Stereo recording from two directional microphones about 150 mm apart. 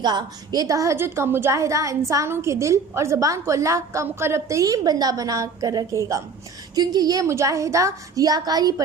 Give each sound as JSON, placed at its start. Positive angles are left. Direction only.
{"t": 0.0, "sound": "a woman's voice", "side_deg": -30}